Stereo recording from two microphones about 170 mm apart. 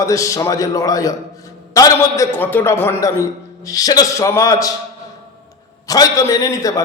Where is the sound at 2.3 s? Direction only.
10° left (ahead or behind).